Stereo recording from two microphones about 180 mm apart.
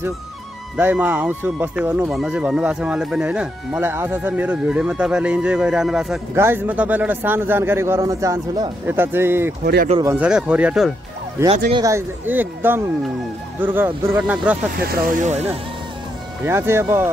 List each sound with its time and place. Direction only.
0.7 s a man's voice: 10° right (ahead or behind)
14.9 s speech: 50° right (ahead or behind)
16.4 s a man's voice: 15° right (ahead or behind)